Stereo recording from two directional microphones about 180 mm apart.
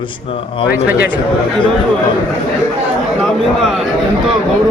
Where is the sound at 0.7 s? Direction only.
10° right (ahead or behind).